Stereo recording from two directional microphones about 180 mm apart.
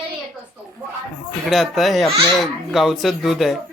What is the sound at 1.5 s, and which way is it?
Speech, centre (ahead or behind).